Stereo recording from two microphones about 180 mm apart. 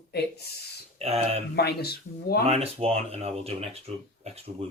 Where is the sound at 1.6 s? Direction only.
60° left (ahead or behind).